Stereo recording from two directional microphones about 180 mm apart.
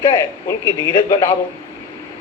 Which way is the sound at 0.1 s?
25° left (ahead or behind).